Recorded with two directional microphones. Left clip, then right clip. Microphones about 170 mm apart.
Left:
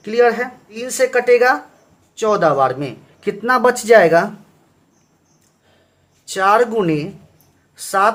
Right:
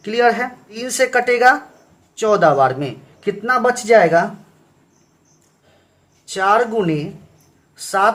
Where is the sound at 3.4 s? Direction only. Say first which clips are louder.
Left 2 dB; 25° left (ahead or behind).